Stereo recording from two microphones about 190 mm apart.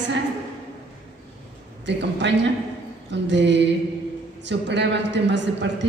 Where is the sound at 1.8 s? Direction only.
70° right (ahead or behind).